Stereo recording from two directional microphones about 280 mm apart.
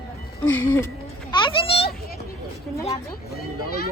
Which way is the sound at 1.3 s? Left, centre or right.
Centre.